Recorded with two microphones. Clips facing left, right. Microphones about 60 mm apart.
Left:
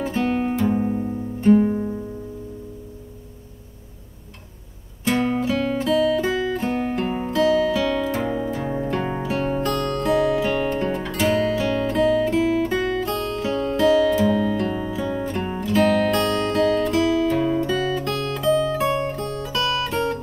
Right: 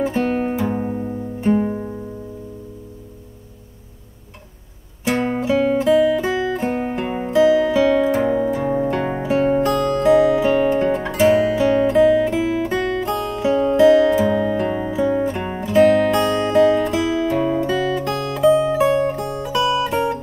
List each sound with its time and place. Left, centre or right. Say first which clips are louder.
0.0 s guitar: right 3 dB; centre
0.7 s music: left 1 dB; centre
5.0 s music: right 1 dB; centre